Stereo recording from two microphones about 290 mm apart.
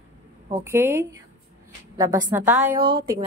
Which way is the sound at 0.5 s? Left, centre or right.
Centre.